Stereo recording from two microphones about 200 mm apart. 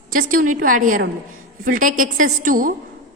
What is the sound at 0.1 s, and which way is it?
A woman's voice, 40° right (ahead or behind).